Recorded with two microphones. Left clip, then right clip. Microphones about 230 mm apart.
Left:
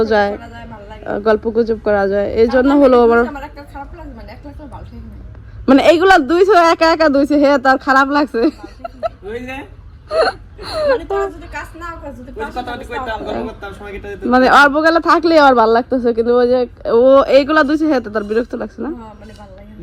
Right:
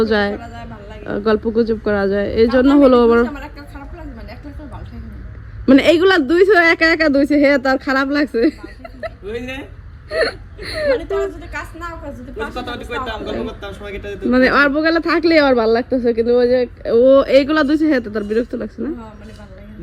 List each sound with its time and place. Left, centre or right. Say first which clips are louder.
0.0 s a sound: left 3 dB; centre
1.2 s a man's voice: left 2 dB; centre
5.6 s a man's voice: left 2 dB; centre
15.2 s speech: left 2 dB; centre
16.9 s speech: left 2 dB; centre